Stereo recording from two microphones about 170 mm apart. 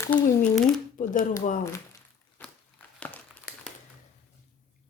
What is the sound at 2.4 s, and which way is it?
Biting, 10° left (ahead or behind).